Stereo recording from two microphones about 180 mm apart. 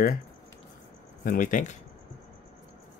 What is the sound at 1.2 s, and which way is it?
Speech, 50° left (ahead or behind).